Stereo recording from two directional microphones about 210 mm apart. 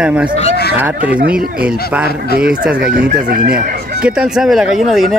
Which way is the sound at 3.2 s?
45° right (ahead or behind).